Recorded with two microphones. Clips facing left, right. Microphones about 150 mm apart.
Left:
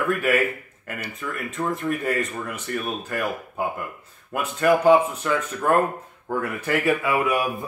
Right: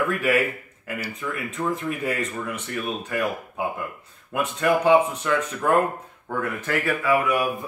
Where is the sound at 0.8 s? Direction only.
5° right (ahead or behind).